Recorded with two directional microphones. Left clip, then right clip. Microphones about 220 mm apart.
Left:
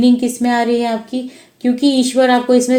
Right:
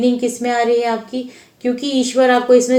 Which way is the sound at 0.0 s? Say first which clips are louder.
Left 2 dB; 55° left (ahead or behind).